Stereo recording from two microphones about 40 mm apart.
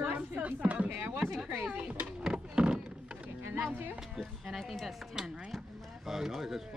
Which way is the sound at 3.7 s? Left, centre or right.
Right.